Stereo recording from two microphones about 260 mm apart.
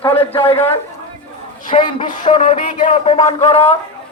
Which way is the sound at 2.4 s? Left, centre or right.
Left.